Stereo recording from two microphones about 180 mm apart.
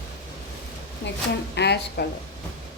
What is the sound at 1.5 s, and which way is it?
Speech, 65° left (ahead or behind).